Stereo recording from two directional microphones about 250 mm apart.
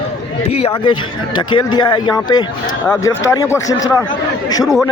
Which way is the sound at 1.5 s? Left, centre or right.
Centre.